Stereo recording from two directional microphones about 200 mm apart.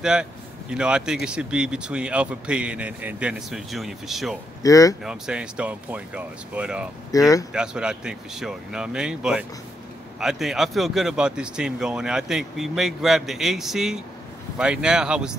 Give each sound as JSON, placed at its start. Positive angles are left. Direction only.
{"t": 0.0, "sound": "speech", "side_deg": -5}
{"t": 4.6, "sound": "speech", "side_deg": 15}
{"t": 5.0, "sound": "speech", "side_deg": -5}
{"t": 7.1, "sound": "speech", "side_deg": 15}
{"t": 7.5, "sound": "speech", "side_deg": -5}